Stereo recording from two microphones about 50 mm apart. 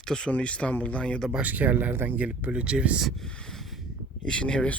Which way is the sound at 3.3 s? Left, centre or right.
Centre.